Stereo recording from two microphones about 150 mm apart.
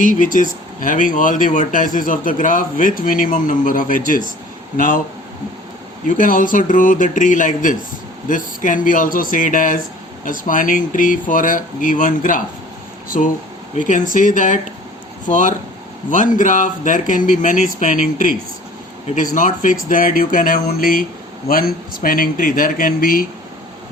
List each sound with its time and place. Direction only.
0.0 s a man's voice: 60° left (ahead or behind)
6.1 s a man's voice: 65° left (ahead or behind)